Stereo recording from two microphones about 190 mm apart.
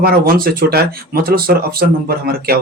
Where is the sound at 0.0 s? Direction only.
50° right (ahead or behind).